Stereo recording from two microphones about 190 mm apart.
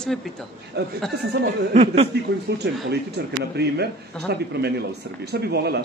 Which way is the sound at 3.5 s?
60° right (ahead or behind).